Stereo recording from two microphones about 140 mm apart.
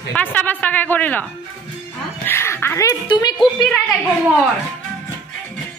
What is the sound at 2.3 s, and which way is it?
Speech, 15° left (ahead or behind).